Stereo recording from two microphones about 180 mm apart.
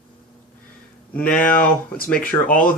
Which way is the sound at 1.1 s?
5° left (ahead or behind).